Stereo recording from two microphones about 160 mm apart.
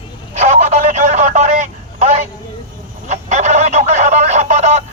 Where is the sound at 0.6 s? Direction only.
50° right (ahead or behind).